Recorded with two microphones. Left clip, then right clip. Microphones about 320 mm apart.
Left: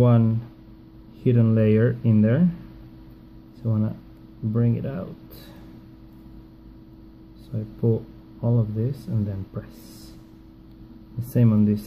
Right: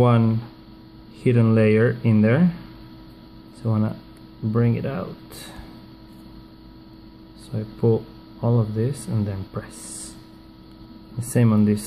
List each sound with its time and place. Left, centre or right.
0.0 s speech: centre
3.6 s speech: centre
7.5 s speech: centre
11.3 s speech: centre